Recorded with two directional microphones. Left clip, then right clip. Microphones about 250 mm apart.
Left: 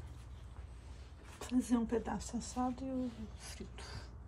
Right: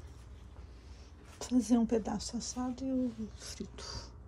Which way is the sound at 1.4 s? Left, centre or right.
Centre.